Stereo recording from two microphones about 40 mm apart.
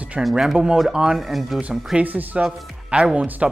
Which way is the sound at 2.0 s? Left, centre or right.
Right.